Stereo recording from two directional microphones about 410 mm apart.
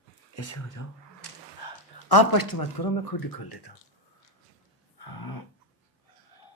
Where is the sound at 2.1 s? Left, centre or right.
Left.